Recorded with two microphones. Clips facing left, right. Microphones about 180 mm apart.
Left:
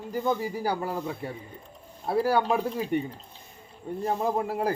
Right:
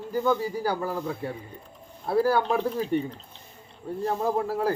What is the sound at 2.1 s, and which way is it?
Speech, 20° left (ahead or behind).